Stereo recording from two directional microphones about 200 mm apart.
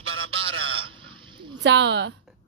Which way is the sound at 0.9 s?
25° right (ahead or behind).